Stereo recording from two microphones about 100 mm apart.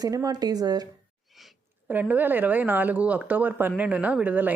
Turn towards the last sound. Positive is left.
turn(degrees=-15)  # may be behind; listen again after turning